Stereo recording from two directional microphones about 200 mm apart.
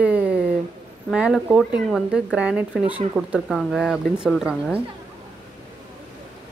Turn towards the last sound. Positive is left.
turn(degrees=0)  # may be behind; listen again after turning